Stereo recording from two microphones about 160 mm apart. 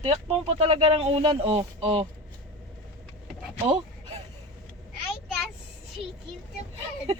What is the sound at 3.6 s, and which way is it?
Speech, 40° right (ahead or behind).